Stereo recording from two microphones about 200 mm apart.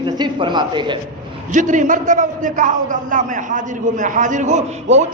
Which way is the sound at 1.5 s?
40° right (ahead or behind).